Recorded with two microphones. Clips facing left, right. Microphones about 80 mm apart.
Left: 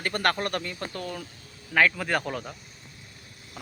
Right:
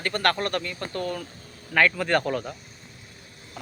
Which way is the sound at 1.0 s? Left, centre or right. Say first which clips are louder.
Right 5 dB; centre.